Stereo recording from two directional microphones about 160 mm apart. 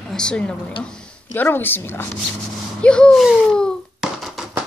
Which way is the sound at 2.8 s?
5° left (ahead or behind).